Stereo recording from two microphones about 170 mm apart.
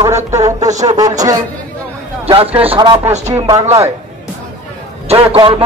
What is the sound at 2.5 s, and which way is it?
Speech, 30° right (ahead or behind).